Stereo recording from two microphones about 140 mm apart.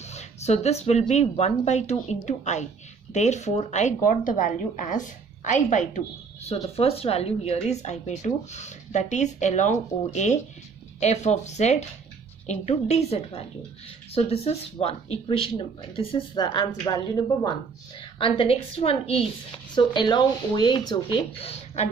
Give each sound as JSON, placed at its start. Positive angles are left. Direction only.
{"t": 0.0, "sound": "a woman's voice", "side_deg": 50}
{"t": 16.3, "sound": "a woman's voice", "side_deg": 30}
{"t": 18.2, "sound": "speech", "side_deg": 40}
{"t": 19.7, "sound": "speech", "side_deg": 35}